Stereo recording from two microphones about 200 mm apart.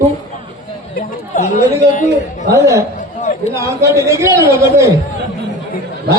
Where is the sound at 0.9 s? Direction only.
40° left (ahead or behind).